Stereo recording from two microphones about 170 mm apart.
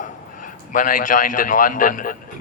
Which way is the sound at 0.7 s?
55° left (ahead or behind).